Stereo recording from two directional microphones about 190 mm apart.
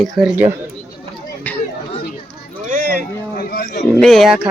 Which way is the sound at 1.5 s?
10° left (ahead or behind).